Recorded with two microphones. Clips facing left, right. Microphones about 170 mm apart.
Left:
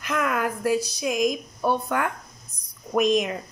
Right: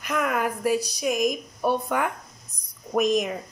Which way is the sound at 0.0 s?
Centre (ahead or behind).